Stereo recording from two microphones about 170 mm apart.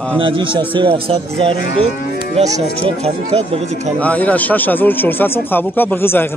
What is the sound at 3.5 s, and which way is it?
Speech, 40° right (ahead or behind).